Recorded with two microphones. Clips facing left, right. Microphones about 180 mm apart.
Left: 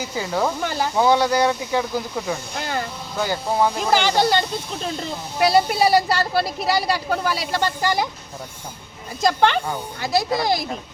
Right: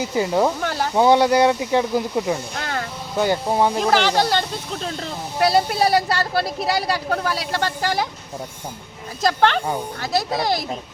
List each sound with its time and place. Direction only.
0.0 s speech: 20° right (ahead or behind)
0.6 s speech: centre (ahead or behind)
0.9 s speech: 20° right (ahead or behind)
2.6 s speech: 5° left (ahead or behind)
3.2 s speech: 20° right (ahead or behind)
3.8 s speech: centre (ahead or behind)
9.2 s speech: centre (ahead or behind)